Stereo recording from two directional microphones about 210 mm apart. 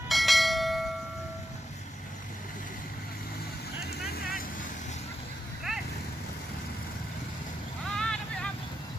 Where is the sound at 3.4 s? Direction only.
50° left (ahead or behind).